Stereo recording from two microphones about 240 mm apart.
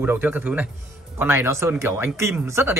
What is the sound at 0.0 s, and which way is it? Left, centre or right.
Speech, centre.